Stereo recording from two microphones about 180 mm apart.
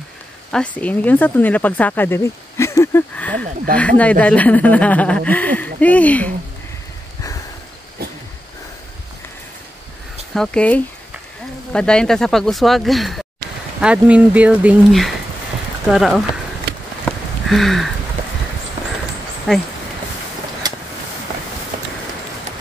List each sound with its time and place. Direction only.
0.5 s speech: 5° left (ahead or behind)
10.3 s speech: 5° left (ahead or behind)
17.0 s a sound: centre (ahead or behind)
19.5 s speech: centre (ahead or behind)
20.6 s vehicle: 20° right (ahead or behind)